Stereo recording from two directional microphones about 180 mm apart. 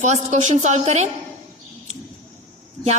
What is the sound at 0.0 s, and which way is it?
A woman's voice, 40° right (ahead or behind).